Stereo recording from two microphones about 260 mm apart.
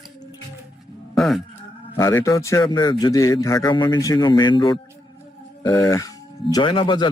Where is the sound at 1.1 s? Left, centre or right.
Centre.